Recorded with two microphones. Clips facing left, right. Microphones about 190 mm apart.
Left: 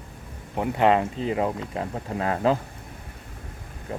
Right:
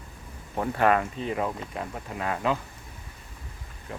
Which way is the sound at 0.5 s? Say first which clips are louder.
Left 3 dB; 15° left (ahead or behind).